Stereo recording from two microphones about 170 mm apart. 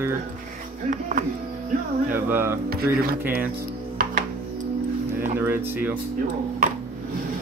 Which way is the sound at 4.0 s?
55° right (ahead or behind).